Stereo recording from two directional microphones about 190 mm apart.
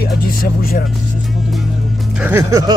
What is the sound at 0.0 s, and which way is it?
Vehicle, 50° left (ahead or behind).